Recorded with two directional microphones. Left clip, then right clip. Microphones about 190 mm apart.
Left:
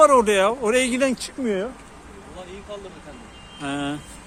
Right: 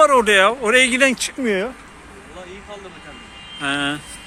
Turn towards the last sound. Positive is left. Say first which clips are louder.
# right 7 dB
turn(degrees=0)  # may be behind; listen again after turning